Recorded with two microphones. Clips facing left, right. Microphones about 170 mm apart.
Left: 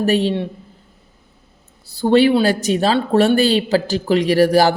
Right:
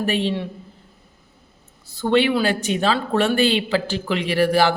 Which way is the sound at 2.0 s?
35° left (ahead or behind).